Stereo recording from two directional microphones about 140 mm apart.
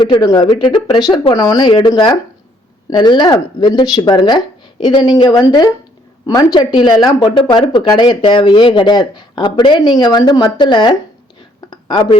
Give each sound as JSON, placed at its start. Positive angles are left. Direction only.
{"t": 0.0, "sound": "speech", "side_deg": 30}